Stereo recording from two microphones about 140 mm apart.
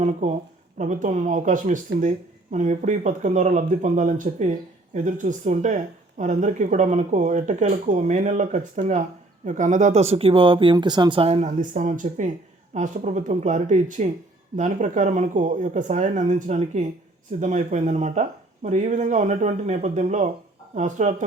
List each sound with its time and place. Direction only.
0.0 s speech: 55° right (ahead or behind); by 11.2 s 30° right (ahead or behind)
11.2 s speech: 50° right (ahead or behind)